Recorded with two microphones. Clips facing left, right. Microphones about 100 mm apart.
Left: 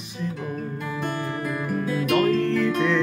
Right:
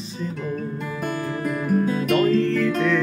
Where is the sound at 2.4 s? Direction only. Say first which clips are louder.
Right 1 dB; 20° left (ahead or behind).